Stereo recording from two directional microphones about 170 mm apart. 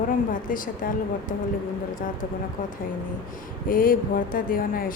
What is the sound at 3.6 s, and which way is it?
Speech, 55° left (ahead or behind).